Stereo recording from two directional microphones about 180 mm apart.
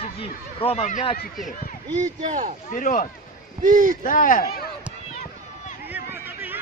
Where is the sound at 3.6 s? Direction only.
50° right (ahead or behind).